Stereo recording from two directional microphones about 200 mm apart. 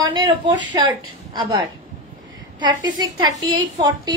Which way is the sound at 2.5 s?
20° right (ahead or behind).